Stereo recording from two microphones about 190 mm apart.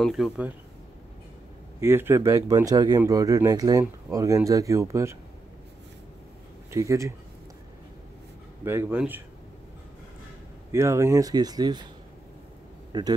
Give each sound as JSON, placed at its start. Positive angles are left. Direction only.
{"t": 0.0, "sound": "speech", "side_deg": 0}
{"t": 1.8, "sound": "speech", "side_deg": -10}
{"t": 6.7, "sound": "speech", "side_deg": -15}
{"t": 8.6, "sound": "speech", "side_deg": -10}
{"t": 10.7, "sound": "speech", "side_deg": -15}
{"t": 12.9, "sound": "speech", "side_deg": -20}